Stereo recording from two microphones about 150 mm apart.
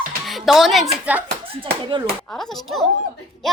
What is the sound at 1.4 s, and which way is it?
Speech, 35° right (ahead or behind).